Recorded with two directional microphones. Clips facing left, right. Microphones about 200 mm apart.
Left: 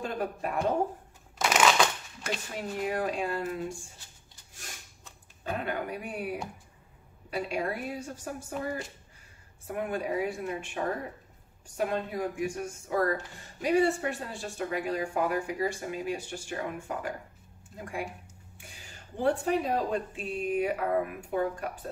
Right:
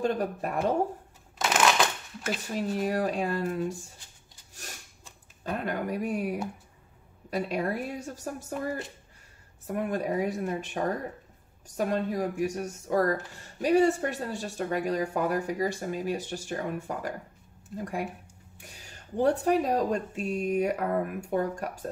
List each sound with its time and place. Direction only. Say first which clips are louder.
0.0 s speech: right 5 dB; 40° right (ahead or behind)
1.4 s a sound: even; centre (ahead or behind)
2.5 s speech: right 4 dB; 40° right (ahead or behind)
5.4 s speech: right 2 dB; 40° right (ahead or behind)
9.7 s speech: right 2 dB; 40° right (ahead or behind)
18.8 s speech: right 6 dB; 40° right (ahead or behind)